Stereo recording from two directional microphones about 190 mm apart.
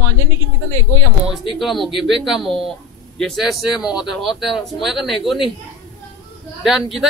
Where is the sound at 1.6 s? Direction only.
Centre (ahead or behind).